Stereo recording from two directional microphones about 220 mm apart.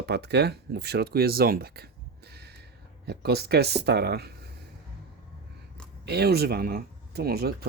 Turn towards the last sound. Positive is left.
turn(degrees=-45)  # may be behind; listen again after turning